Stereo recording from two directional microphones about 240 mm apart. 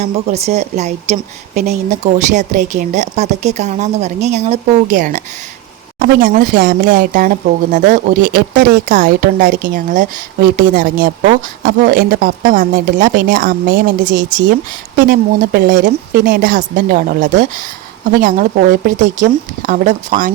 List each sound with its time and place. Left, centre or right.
0.0 s speech: right